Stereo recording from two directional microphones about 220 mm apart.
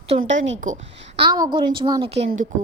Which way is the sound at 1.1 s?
20° right (ahead or behind).